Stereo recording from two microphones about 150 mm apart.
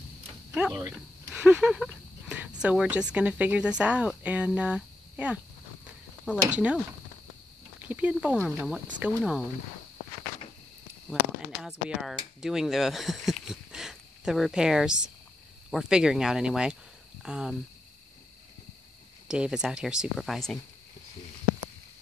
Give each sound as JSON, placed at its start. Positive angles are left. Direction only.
{"t": 0.7, "sound": "speech", "side_deg": -25}
{"t": 1.3, "sound": "a sound", "side_deg": -5}
{"t": 2.6, "sound": "speech", "side_deg": -5}
{"t": 7.8, "sound": "speech", "side_deg": -10}
{"t": 11.1, "sound": "speech", "side_deg": 0}
{"t": 19.2, "sound": "speech", "side_deg": -5}